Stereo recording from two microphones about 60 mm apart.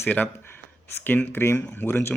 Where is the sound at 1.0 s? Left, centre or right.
Left.